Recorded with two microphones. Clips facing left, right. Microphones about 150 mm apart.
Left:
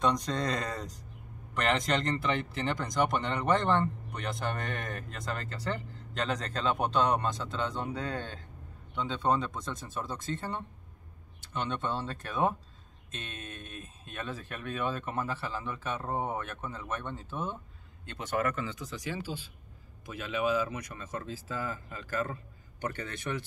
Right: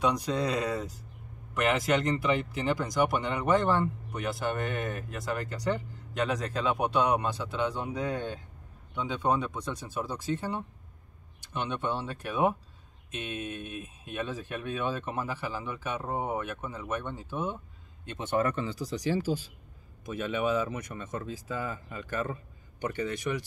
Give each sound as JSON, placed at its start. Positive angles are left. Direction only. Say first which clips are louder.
{"t": 0.0, "sound": "speech", "louder": "right 2 dB", "side_deg": -10}
{"t": 20.1, "sound": "speech", "louder": "right 2 dB", "side_deg": -25}